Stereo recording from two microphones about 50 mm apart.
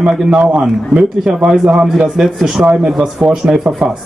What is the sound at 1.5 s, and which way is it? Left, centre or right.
A man's voice, centre.